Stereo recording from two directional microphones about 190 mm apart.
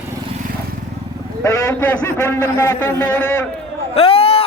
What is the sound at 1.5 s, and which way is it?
A man's voice, 15° left (ahead or behind).